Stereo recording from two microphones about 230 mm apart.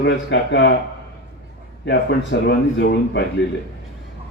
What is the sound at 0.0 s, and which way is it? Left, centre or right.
Speech, left.